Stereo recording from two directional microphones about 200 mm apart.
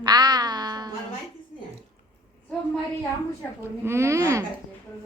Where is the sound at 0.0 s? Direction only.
20° right (ahead or behind).